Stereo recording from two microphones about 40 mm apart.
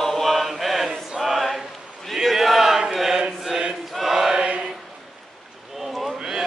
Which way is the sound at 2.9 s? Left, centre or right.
Centre.